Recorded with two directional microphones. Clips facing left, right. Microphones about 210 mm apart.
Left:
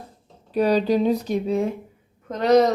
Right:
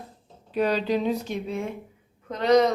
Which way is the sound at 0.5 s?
40° left (ahead or behind).